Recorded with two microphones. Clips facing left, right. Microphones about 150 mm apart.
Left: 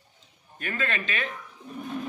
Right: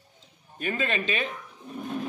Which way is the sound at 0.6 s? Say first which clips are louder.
Right 3 dB; 20° right (ahead or behind).